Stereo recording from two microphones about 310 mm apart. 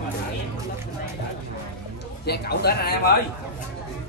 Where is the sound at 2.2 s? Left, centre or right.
Left.